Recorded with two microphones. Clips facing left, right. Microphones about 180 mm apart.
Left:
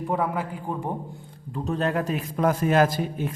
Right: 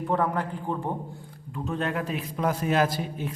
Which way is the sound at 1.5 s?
35° left (ahead or behind).